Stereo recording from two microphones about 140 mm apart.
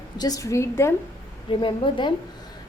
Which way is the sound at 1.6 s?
35° left (ahead or behind).